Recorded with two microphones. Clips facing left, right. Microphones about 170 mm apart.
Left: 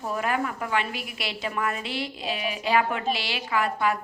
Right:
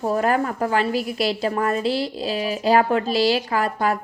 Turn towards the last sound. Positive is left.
turn(degrees=-40)  # may be behind; listen again after turning